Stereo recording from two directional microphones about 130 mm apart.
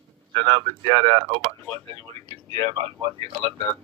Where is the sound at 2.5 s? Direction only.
45° right (ahead or behind).